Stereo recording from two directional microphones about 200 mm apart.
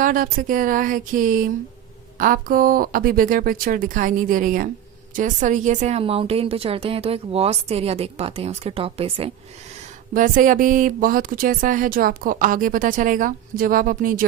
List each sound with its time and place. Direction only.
0.0 s a woman's voice: 45° right (ahead or behind)
10.2 s a woman's voice: 40° right (ahead or behind)